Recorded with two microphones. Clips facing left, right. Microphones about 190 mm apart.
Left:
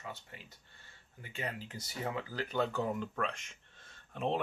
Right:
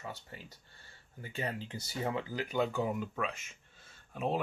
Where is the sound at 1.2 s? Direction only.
30° right (ahead or behind).